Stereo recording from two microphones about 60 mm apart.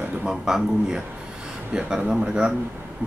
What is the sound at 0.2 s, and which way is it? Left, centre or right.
A man's voice, centre.